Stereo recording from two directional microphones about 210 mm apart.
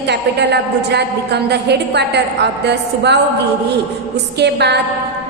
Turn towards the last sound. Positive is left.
turn(degrees=-55)  # may be behind; listen again after turning